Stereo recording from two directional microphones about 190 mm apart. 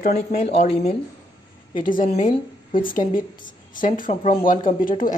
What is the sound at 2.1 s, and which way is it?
Speech, 30° left (ahead or behind).